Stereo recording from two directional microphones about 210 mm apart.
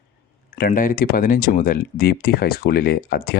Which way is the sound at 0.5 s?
45° left (ahead or behind).